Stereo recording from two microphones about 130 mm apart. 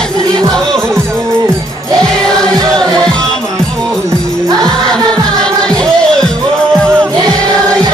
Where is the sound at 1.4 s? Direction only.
30° right (ahead or behind).